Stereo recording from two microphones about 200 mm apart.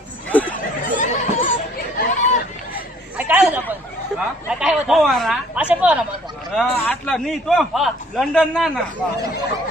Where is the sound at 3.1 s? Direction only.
5° right (ahead or behind).